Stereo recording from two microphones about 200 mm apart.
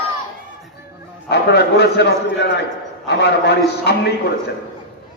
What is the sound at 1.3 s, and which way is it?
A man's voice, 55° left (ahead or behind).